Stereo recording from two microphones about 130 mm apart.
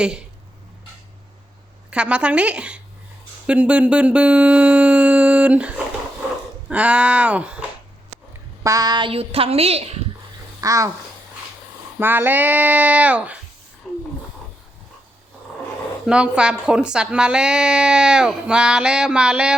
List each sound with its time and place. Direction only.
0.0 s speech: 5° right (ahead or behind)
1.9 s a woman's voice: 10° right (ahead or behind)
8.6 s speech: 30° right (ahead or behind); by 10.0 s 55° right (ahead or behind)
10.6 s speech: 25° right (ahead or behind)
11.9 s a woman's voice: 15° right (ahead or behind)
13.8 s a sound: 5° left (ahead or behind)
16.0 s a woman's voice: 10° right (ahead or behind)